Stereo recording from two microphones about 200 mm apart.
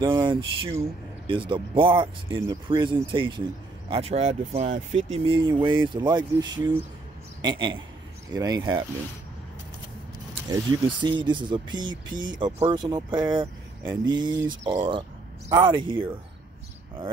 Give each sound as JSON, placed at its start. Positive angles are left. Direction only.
{"t": 0.0, "sound": "speech", "side_deg": -20}
{"t": 11.0, "sound": "speech", "side_deg": -25}